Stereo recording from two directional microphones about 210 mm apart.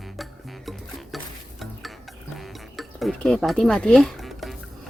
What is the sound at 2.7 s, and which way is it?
Dishes, centre (ahead or behind).